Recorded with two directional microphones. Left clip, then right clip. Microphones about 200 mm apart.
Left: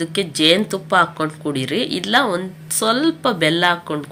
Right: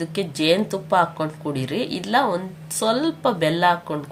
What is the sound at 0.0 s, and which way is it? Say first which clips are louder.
Speech: left 6 dB; 5° right (ahead or behind).